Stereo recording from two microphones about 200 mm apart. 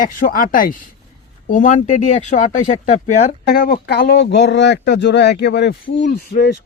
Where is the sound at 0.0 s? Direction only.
40° left (ahead or behind).